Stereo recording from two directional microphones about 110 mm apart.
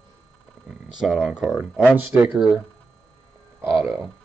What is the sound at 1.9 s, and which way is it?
Speech, 15° right (ahead or behind).